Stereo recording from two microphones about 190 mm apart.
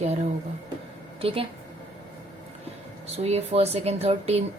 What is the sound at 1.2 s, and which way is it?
Speech, 30° right (ahead or behind).